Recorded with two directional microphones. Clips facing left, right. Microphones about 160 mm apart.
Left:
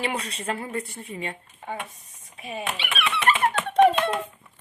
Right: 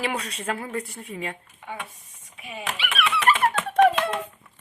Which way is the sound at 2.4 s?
35° left (ahead or behind).